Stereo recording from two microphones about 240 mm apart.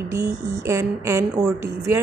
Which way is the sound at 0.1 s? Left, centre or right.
Centre.